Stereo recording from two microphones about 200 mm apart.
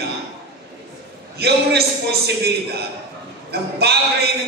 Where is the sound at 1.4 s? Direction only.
55° right (ahead or behind).